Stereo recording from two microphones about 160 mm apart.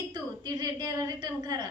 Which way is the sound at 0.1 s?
25° right (ahead or behind).